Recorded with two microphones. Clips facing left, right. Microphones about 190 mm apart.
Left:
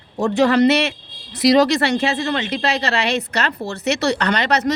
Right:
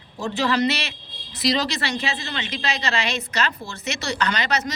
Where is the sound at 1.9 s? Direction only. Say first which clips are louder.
Left 9 dB; 55° left (ahead or behind).